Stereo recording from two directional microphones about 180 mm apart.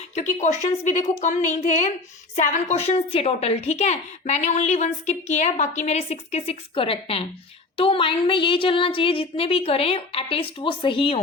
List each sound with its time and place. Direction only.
0.1 s a woman's voice: 40° left (ahead or behind)